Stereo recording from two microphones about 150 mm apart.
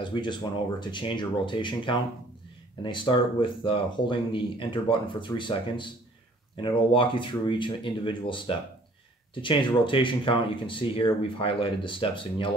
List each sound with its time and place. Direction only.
0.0 s speech: 30° left (ahead or behind)